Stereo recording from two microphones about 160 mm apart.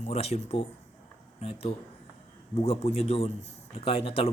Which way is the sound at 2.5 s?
40° left (ahead or behind).